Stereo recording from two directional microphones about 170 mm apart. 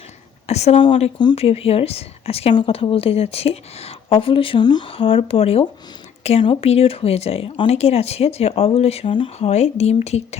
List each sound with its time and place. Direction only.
0.4 s speech: 40° left (ahead or behind)